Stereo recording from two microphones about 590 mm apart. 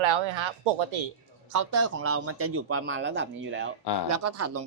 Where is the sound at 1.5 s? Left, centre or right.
Right.